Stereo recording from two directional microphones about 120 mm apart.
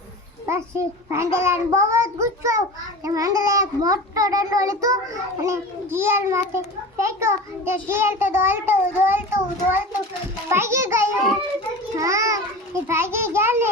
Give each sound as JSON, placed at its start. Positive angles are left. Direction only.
{"t": 0.4, "sound": "a child's voice", "side_deg": -20}